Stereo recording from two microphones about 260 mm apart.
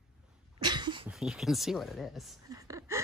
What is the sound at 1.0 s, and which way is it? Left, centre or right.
Speech, centre.